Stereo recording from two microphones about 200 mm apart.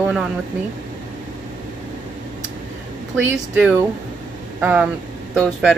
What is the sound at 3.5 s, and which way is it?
Speech, 5° right (ahead or behind).